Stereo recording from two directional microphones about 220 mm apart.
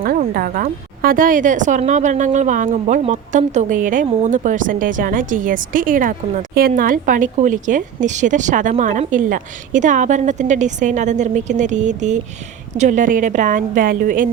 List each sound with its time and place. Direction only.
0.0 s a woman's voice: 40° right (ahead or behind)